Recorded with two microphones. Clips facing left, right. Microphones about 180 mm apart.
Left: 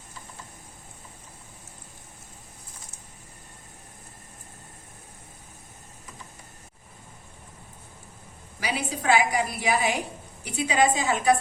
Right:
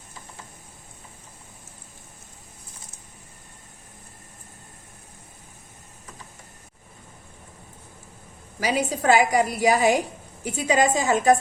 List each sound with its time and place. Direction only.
8.6 s a woman's voice: 40° right (ahead or behind)